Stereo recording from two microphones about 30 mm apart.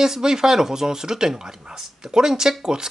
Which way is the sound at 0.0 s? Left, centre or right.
Centre.